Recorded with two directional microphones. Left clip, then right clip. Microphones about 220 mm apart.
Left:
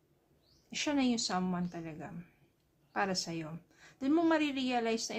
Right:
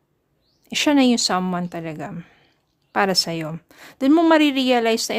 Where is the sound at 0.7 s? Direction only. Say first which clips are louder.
Right 16 dB; 50° right (ahead or behind).